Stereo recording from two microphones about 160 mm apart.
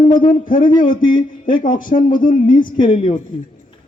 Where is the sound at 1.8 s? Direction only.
55° left (ahead or behind).